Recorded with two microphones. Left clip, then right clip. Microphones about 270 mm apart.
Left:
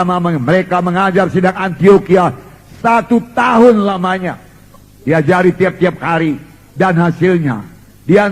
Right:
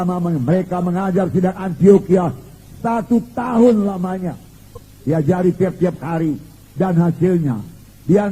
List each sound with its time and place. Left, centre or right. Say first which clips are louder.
0.0 s a man's voice: left 7 dB; left